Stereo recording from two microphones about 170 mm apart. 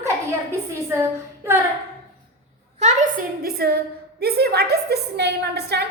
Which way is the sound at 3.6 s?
65° right (ahead or behind).